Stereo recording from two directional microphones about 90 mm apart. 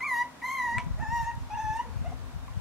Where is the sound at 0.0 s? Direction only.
Centre (ahead or behind).